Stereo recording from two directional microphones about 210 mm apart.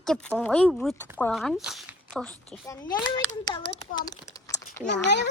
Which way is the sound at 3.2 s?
15° left (ahead or behind).